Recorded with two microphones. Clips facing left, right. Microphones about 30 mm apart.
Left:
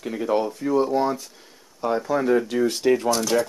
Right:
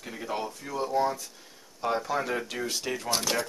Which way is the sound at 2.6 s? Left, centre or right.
Centre.